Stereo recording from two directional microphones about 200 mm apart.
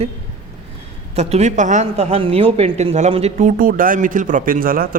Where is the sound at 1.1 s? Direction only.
30° right (ahead or behind).